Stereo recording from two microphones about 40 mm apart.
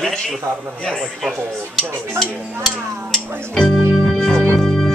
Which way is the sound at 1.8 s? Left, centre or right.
Centre.